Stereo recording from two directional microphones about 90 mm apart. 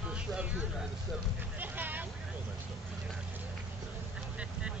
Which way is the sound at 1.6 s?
20° right (ahead or behind).